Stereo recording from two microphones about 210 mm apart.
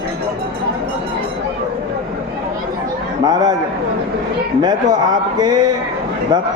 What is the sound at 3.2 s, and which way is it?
Speech, 20° right (ahead or behind).